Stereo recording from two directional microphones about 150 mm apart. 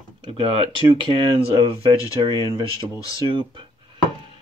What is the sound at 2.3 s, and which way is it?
Speech, 25° right (ahead or behind).